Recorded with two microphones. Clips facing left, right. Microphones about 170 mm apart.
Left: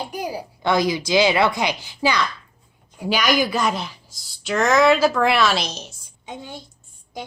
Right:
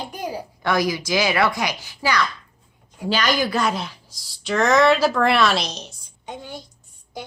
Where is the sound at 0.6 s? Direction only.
25° left (ahead or behind).